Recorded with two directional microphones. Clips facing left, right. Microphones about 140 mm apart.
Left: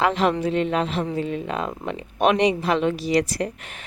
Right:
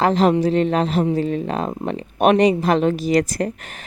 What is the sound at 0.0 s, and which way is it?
Speech, 40° right (ahead or behind).